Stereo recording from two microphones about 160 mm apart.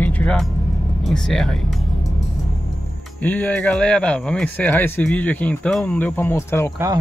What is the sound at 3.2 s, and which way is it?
Speech, 10° left (ahead or behind).